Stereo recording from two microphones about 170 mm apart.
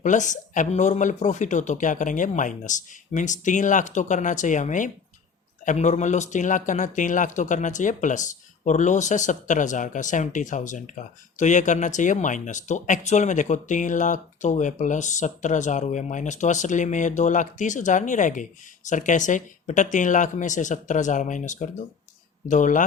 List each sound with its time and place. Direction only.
0.0 s speech: 45° left (ahead or behind)